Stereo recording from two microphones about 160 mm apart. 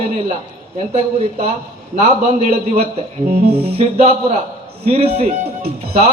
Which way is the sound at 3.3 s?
65° right (ahead or behind).